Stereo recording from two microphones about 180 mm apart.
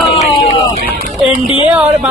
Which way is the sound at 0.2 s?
35° left (ahead or behind).